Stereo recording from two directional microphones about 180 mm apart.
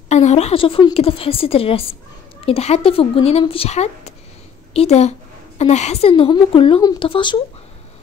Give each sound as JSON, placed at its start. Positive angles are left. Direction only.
{"t": 0.1, "sound": "a woman's voice", "side_deg": 40}